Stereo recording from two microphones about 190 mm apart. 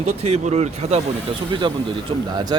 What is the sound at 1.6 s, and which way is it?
Speech, 25° right (ahead or behind).